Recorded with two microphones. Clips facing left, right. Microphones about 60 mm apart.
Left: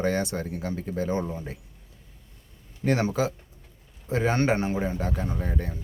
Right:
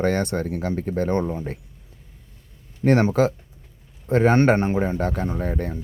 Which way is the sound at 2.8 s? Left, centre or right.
Right.